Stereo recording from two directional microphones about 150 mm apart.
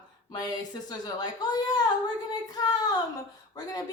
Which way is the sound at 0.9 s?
25° left (ahead or behind).